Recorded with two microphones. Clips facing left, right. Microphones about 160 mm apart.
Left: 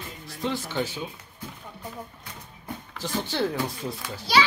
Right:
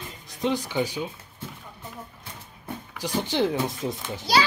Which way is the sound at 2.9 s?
15° right (ahead or behind).